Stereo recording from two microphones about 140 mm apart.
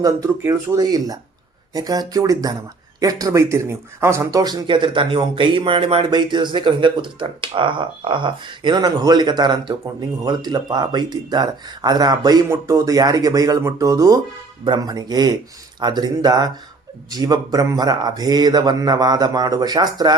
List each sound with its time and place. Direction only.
0.0 s speech: 20° right (ahead or behind)